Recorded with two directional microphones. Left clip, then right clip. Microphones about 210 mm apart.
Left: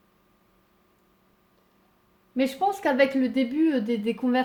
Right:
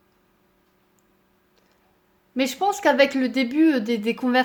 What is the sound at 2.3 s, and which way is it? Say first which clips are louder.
Speech: right 2 dB; 15° right (ahead or behind).